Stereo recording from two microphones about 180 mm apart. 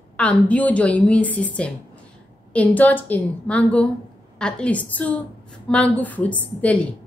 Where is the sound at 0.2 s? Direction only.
5° left (ahead or behind).